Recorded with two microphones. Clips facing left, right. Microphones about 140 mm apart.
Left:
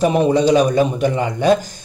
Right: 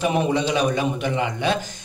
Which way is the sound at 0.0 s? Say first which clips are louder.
Left 7 dB; 40° left (ahead or behind).